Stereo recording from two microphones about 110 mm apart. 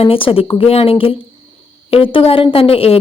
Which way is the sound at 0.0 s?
55° left (ahead or behind).